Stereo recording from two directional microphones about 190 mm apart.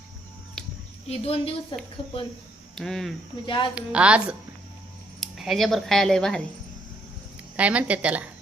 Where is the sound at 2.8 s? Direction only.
Centre (ahead or behind).